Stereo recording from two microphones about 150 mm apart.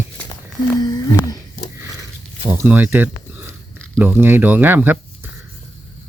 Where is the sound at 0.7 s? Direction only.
25° left (ahead or behind).